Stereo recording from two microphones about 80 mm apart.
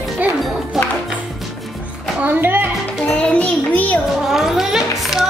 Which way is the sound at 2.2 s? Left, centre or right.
Right.